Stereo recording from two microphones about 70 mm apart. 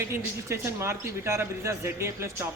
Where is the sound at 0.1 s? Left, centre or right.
Right.